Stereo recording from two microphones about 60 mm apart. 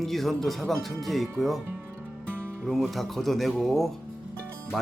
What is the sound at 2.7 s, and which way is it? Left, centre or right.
Speech, centre.